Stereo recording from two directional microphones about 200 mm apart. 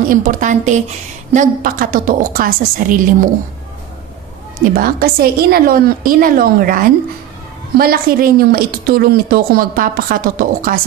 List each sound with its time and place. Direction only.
0.1 s a woman's voice: 40° right (ahead or behind)
4.6 s a woman's voice: 45° right (ahead or behind)